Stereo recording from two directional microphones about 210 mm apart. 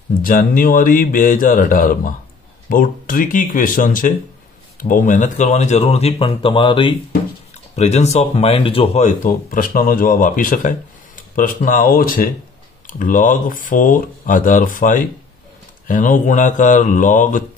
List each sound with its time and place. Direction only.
0.2 s speech: 40° left (ahead or behind)